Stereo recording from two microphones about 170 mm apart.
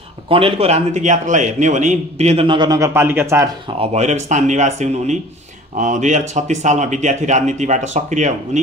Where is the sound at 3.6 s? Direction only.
35° right (ahead or behind).